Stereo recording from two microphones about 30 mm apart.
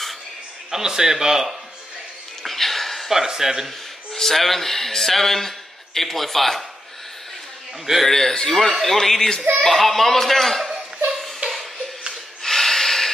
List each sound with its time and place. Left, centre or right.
0.7 s a man's voice: centre
2.4 s a sound: centre
3.1 s a man's voice: centre
4.1 s speech: centre
8.0 s a man's voice: centre
11.4 s a sound: right
12.4 s snort: centre